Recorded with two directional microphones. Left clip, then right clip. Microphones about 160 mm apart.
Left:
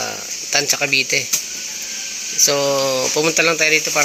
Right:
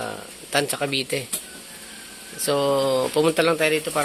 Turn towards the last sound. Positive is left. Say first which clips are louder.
# left 6 dB
turn(degrees=-10)  # may be behind; listen again after turning